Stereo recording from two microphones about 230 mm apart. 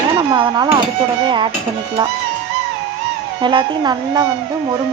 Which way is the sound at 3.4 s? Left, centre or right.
Centre.